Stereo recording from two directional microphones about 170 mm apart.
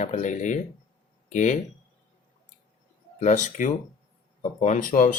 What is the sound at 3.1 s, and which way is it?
Speech, 45° left (ahead or behind).